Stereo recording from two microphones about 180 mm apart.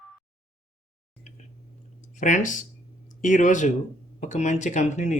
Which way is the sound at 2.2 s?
45° left (ahead or behind).